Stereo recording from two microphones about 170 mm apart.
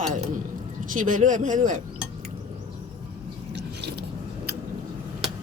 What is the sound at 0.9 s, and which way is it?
Speech, 50° right (ahead or behind).